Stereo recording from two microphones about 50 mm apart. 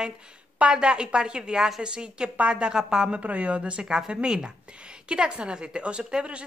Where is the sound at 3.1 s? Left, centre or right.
Right.